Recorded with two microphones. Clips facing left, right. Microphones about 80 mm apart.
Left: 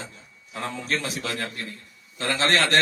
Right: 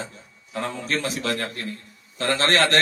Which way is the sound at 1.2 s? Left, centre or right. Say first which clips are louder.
Right 4 dB; right.